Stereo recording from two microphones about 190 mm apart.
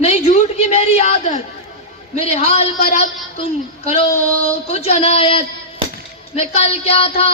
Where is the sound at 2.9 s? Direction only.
35° left (ahead or behind).